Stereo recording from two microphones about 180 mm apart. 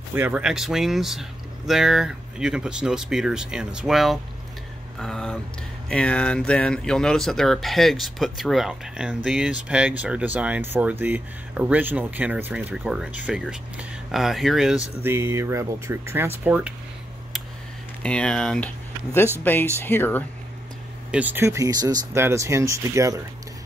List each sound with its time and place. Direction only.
0.1 s speech: 10° right (ahead or behind)
15.0 s speech: 15° right (ahead or behind)
18.0 s speech: 5° left (ahead or behind)
21.1 s speech: 10° right (ahead or behind)